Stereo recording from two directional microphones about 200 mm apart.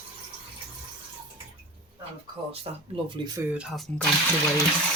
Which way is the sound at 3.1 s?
20° right (ahead or behind).